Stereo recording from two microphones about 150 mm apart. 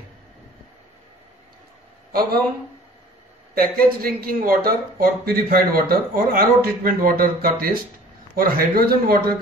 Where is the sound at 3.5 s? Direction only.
75° right (ahead or behind).